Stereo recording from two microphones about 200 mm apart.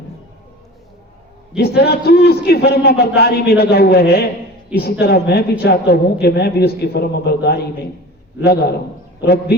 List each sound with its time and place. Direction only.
1.5 s a man's voice: 55° left (ahead or behind)
9.2 s a man's voice: 50° left (ahead or behind)